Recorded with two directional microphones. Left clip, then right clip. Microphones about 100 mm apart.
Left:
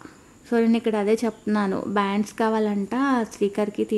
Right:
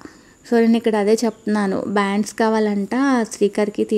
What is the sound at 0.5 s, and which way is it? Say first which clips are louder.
Speech: right 5 dB; 30° right (ahead or behind).